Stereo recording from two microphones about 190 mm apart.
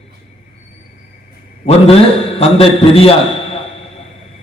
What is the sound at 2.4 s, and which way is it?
Speech, 30° left (ahead or behind).